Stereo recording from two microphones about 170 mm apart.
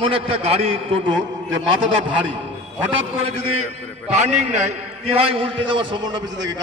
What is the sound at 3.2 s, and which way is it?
A man's voice, 35° right (ahead or behind).